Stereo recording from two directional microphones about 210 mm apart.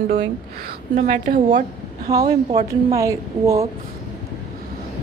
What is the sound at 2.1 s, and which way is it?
A woman's voice, 15° right (ahead or behind).